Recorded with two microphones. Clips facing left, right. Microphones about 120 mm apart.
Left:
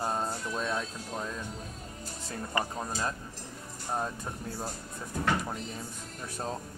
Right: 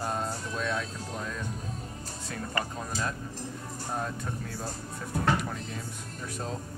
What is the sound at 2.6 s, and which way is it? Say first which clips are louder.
Speech: left 2 dB; 15° left (ahead or behind).